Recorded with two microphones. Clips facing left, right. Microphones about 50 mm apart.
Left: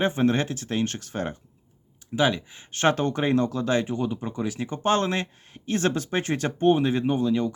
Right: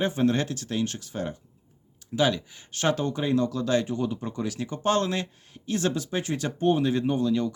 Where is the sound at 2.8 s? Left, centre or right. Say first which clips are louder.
Left 3 dB; left.